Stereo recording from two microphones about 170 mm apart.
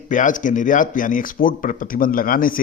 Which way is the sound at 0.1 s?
50° left (ahead or behind).